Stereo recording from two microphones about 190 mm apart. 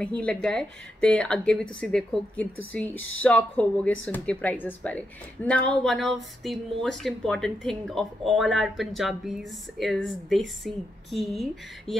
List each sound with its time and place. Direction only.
0.0 s speech: 5° left (ahead or behind)